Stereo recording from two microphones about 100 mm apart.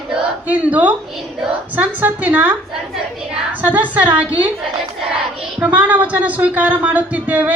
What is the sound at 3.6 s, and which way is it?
Speech, 15° right (ahead or behind).